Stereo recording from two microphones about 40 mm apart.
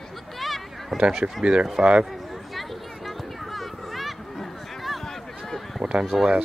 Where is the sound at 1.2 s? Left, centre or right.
Right.